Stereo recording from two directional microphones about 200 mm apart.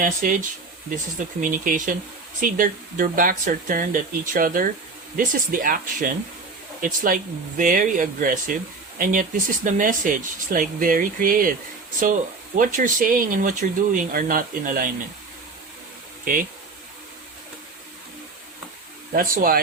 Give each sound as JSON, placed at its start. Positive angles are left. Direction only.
{"t": 0.0, "sound": "speech", "side_deg": -40}
{"t": 1.4, "sound": "speech", "side_deg": -40}
{"t": 12.5, "sound": "speech", "side_deg": -40}
{"t": 16.2, "sound": "speech", "side_deg": -45}
{"t": 19.1, "sound": "speech", "side_deg": -45}